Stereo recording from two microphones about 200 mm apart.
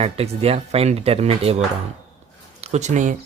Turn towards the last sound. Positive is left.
turn(degrees=-35)  # may be behind; listen again after turning